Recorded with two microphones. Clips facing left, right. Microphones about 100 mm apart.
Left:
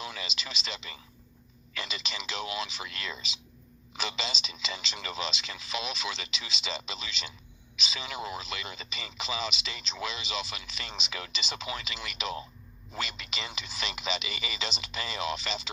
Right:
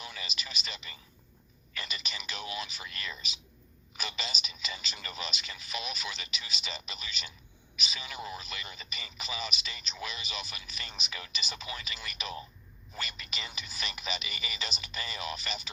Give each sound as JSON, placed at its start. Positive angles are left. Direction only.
{"t": 0.0, "sound": "speech", "side_deg": 90}